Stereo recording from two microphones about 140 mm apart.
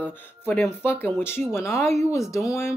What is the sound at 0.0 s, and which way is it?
Speech, 15° left (ahead or behind).